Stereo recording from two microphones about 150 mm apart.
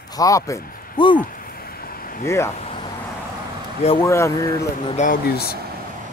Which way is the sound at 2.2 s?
20° left (ahead or behind).